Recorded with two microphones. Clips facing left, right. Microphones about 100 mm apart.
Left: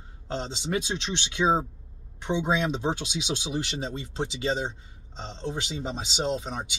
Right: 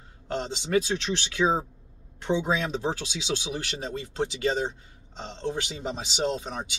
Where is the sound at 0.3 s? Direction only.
25° left (ahead or behind).